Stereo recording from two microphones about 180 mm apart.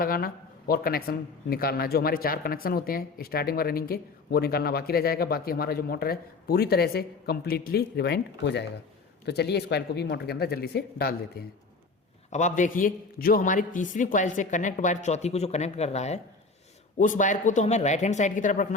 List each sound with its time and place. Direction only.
0.0 s a man's voice: 55° left (ahead or behind)
12.3 s a man's voice: 40° left (ahead or behind)